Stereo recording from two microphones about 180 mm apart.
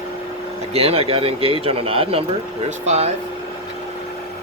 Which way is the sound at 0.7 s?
35° right (ahead or behind).